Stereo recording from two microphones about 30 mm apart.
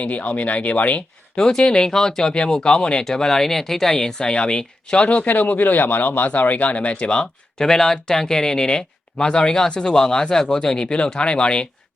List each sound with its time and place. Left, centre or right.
0.0 s speech: left
1.4 s speech: left
3.2 s speech: centre
3.9 s speech: left
5.2 s speech: left
6.4 s speech: left
7.6 s speech: centre; by 11.7 s left